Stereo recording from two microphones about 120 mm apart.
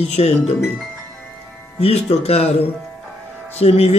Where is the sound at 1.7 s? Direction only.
60° left (ahead or behind).